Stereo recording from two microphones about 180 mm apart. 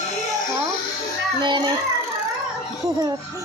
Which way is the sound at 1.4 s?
25° right (ahead or behind).